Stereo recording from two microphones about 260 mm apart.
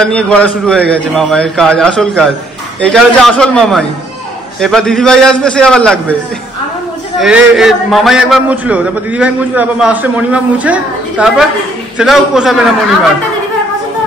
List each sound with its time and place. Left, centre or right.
0.0 s a man's voice: centre
7.2 s a man's voice: centre